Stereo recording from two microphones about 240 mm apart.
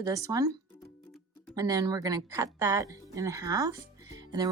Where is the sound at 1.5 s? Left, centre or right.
Centre.